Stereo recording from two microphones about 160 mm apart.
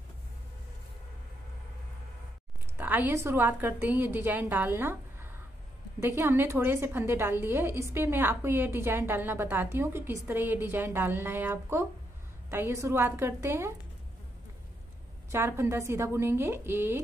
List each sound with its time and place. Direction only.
2.8 s a woman's voice: 10° right (ahead or behind)
15.3 s a woman's voice: 15° right (ahead or behind)